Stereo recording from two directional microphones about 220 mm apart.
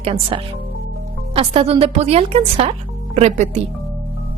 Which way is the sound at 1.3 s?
25° right (ahead or behind).